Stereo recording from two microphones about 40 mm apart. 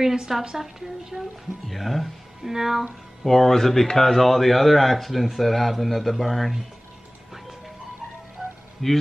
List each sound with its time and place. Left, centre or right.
0.0 s a woman's voice: centre
1.7 s a woman's voice: centre
2.8 s speech: centre
8.8 s speech: centre